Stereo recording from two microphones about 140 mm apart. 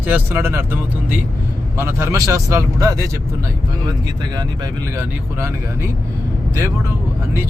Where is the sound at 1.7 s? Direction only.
20° right (ahead or behind).